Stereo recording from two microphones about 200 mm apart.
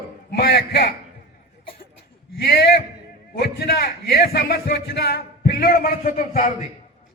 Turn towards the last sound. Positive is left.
turn(degrees=40)  # may be behind; listen again after turning